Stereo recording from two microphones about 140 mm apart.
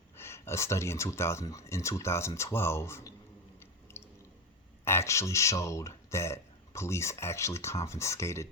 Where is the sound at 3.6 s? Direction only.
20° left (ahead or behind).